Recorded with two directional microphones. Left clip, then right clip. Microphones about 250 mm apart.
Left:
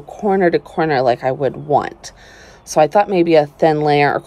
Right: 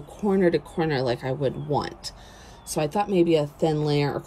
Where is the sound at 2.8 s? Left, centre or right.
Left.